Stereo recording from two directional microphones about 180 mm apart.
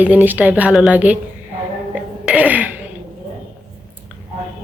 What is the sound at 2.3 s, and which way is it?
Speech, 10° right (ahead or behind).